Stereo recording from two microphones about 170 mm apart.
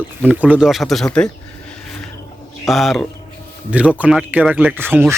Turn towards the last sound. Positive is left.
turn(degrees=-10)  # may be behind; listen again after turning